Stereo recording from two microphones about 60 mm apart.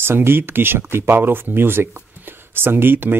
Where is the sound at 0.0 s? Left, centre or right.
Right.